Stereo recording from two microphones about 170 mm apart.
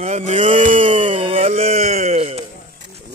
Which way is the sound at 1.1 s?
30° right (ahead or behind).